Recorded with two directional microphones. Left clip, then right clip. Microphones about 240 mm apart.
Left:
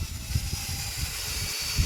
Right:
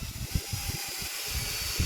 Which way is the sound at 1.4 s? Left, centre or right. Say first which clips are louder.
Left 3 dB; centre.